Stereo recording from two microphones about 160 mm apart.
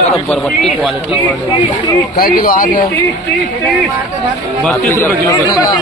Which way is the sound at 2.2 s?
70° left (ahead or behind).